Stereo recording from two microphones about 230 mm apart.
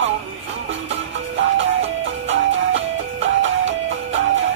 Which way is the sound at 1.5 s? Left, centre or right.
Right.